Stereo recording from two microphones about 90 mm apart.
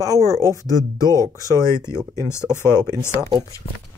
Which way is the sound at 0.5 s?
40° left (ahead or behind).